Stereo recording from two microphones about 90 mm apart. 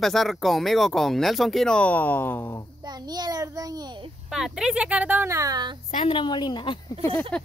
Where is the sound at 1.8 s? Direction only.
20° left (ahead or behind).